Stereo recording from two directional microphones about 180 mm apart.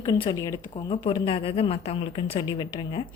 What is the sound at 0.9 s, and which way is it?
A woman's voice, 30° left (ahead or behind).